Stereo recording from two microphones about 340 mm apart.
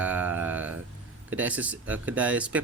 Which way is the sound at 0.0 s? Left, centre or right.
Centre.